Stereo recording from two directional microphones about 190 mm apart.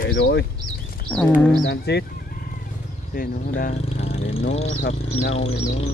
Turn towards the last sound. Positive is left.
turn(degrees=35)  # may be behind; listen again after turning